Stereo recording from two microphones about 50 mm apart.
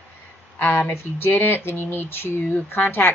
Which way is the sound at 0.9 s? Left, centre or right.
Left.